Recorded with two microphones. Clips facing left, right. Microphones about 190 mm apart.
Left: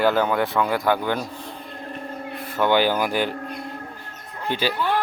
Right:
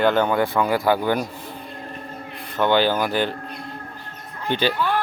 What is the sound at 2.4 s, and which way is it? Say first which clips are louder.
Speech: right 1 dB; 5° left (ahead or behind).